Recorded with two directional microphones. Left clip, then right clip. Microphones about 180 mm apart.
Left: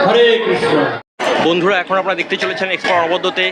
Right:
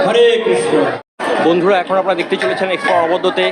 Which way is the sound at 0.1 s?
30° right (ahead or behind).